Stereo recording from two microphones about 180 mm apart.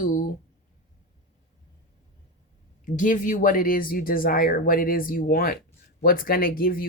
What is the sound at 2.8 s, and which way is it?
Speech, 45° left (ahead or behind).